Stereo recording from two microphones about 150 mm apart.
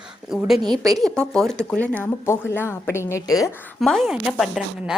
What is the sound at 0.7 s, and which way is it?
Speech, 25° right (ahead or behind).